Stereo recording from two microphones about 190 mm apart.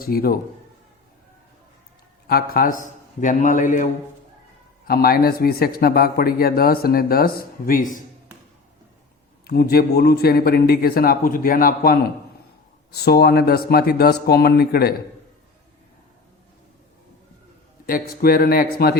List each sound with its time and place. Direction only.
0.0 s speech: 50° left (ahead or behind)
2.2 s speech: 55° left (ahead or behind)
4.9 s speech: 55° left (ahead or behind)
9.5 s speech: 55° left (ahead or behind)
17.8 s speech: 50° left (ahead or behind)